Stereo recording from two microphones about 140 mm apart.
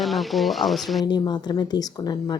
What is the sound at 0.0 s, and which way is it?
Speech, centre (ahead or behind).